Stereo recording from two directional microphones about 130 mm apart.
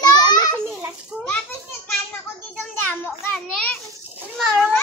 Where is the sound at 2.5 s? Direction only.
10° left (ahead or behind).